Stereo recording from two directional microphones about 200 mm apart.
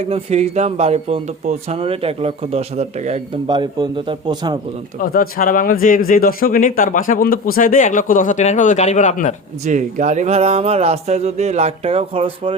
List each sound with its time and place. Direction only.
0.1 s speech: 30° right (ahead or behind)
3.5 s a man's voice: 20° right (ahead or behind)
4.9 s a man's voice: 45° left (ahead or behind)
9.6 s speech: 40° right (ahead or behind)